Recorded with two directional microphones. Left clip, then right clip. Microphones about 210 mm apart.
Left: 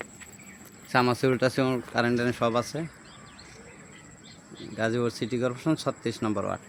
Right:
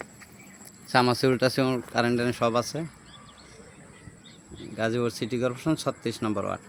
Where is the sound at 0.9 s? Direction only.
10° right (ahead or behind).